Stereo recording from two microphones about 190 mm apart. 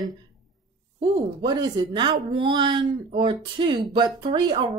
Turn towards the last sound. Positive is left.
turn(degrees=-25)  # may be behind; listen again after turning